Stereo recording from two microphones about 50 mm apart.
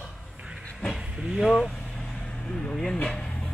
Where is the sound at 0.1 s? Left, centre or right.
Centre.